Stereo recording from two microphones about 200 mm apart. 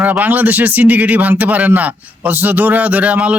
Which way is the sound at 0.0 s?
10° right (ahead or behind).